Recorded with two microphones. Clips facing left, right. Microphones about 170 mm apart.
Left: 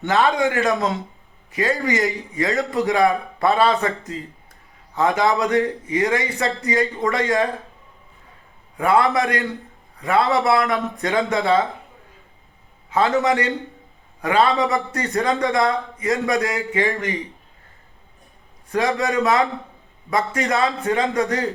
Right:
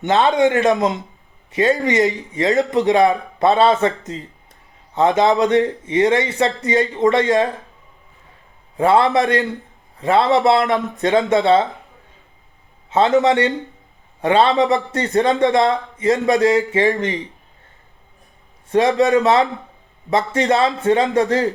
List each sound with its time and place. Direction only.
0.0 s a man's voice: 20° right (ahead or behind)
8.8 s a man's voice: 25° right (ahead or behind)
12.9 s a man's voice: 20° right (ahead or behind)
18.7 s a man's voice: 20° right (ahead or behind)